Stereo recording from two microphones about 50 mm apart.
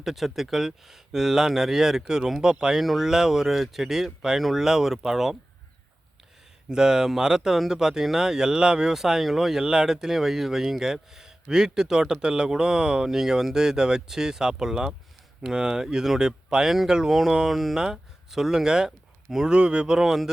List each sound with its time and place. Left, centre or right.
0.0 s speech: centre
6.7 s speech: centre
18.9 s a sound: centre
19.5 s speech: centre
20.0 s speech: centre